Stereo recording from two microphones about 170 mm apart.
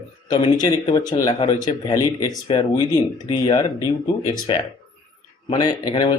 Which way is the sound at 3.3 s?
30° left (ahead or behind).